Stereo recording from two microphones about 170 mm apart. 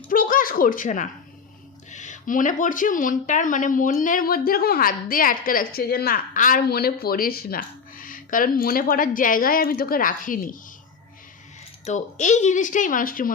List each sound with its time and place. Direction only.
0.1 s speech: 55° left (ahead or behind)
11.9 s speech: 45° left (ahead or behind)